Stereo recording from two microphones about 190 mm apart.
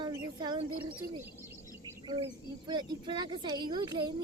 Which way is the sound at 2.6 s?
25° right (ahead or behind).